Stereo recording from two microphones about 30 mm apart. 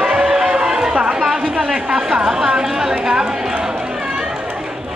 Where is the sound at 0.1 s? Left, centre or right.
Right.